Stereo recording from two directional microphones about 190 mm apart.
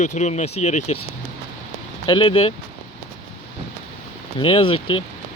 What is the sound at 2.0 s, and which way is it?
Speech, 30° left (ahead or behind).